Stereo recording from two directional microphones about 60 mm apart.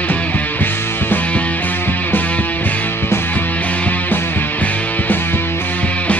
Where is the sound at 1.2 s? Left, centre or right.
Left.